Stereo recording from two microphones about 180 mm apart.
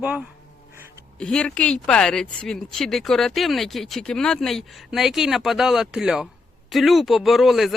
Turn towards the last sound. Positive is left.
turn(degrees=0)  # may be behind; listen again after turning